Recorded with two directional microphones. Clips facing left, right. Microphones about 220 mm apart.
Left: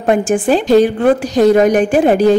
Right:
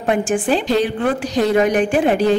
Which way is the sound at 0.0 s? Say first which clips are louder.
Left 5 dB; 45° left (ahead or behind).